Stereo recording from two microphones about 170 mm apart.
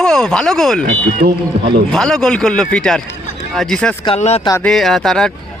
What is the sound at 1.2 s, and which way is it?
Speech, 60° right (ahead or behind).